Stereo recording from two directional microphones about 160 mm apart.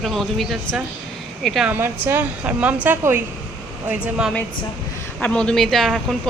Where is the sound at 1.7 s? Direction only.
15° right (ahead or behind).